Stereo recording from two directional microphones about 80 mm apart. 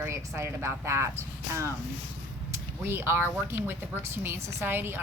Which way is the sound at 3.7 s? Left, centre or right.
Right.